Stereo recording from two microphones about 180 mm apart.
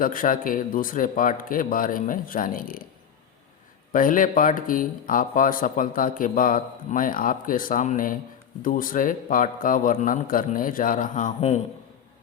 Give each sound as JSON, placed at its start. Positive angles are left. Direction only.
{"t": 0.0, "sound": "speech", "side_deg": 50}
{"t": 3.9, "sound": "speech", "side_deg": 50}